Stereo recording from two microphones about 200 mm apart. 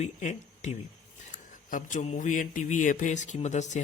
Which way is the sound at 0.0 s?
35° left (ahead or behind).